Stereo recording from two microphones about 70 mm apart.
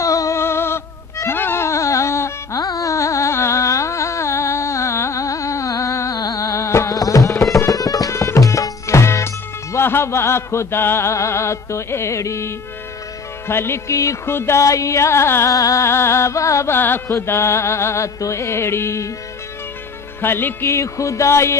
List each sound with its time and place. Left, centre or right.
0.0 s music: left
0.4 s music: left
2.6 s carnatic music: left
7.0 s music: left
14.2 s speech: left
15.5 s speech: left
16.7 s carnatic music: left
17.1 s music: left
20.2 s music: left